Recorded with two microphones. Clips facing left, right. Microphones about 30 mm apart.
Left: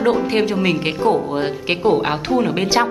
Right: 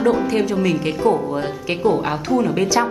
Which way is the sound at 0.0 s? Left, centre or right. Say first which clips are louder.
Left 1 dB; left.